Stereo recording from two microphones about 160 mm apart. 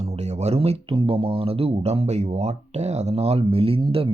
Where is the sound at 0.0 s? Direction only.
40° right (ahead or behind).